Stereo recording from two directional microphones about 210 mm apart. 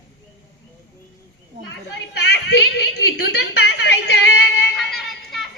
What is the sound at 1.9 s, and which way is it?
A woman's voice, 55° left (ahead or behind).